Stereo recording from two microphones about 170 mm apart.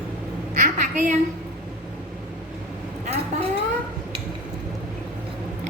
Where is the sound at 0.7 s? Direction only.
45° right (ahead or behind).